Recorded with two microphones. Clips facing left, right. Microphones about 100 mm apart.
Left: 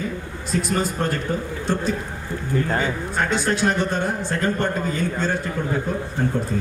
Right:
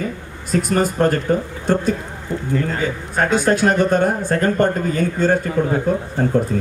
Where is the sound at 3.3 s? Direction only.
50° right (ahead or behind).